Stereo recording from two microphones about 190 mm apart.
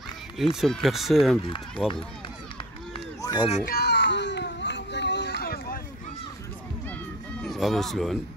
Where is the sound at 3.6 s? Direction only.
55° left (ahead or behind).